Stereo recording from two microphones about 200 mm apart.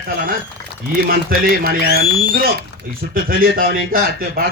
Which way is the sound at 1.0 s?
45° right (ahead or behind).